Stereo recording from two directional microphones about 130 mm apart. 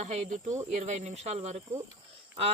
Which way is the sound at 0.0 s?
60° right (ahead or behind).